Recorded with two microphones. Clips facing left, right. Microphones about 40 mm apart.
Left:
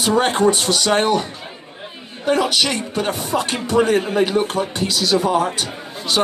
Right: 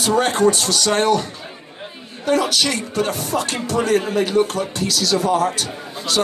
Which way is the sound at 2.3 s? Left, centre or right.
Left.